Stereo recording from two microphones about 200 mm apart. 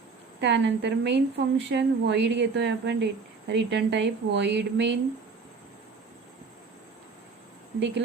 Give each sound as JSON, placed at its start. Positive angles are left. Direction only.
{"t": 0.3, "sound": "a woman's voice", "side_deg": -60}
{"t": 7.8, "sound": "a woman's voice", "side_deg": -60}